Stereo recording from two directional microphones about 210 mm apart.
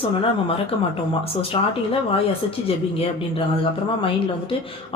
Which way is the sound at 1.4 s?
25° left (ahead or behind).